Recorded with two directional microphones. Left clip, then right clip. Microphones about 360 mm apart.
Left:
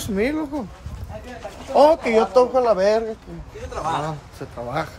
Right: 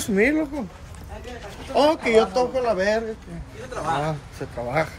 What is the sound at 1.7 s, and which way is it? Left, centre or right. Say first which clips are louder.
Speech: left 3 dB; centre.